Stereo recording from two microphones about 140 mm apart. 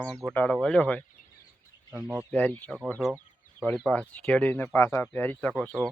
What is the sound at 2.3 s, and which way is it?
Speech, 10° left (ahead or behind).